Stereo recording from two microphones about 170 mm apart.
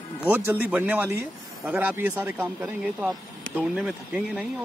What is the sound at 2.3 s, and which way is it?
Speech, 5° right (ahead or behind).